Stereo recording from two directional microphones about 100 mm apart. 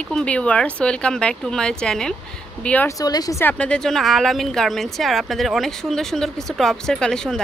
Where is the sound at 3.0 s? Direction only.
40° left (ahead or behind).